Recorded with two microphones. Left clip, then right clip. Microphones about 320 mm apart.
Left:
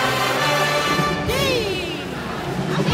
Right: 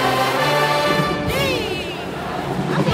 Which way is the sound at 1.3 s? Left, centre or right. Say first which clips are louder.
Even; left.